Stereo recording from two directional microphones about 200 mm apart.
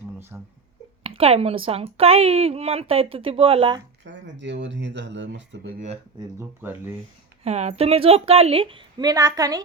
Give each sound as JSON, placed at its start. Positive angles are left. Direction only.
{"t": 0.3, "sound": "speech", "side_deg": -10}
{"t": 1.0, "sound": "a woman's voice", "side_deg": -30}
{"t": 4.0, "sound": "speech", "side_deg": -65}
{"t": 6.1, "sound": "speech", "side_deg": -10}
{"t": 7.4, "sound": "a woman's voice", "side_deg": -35}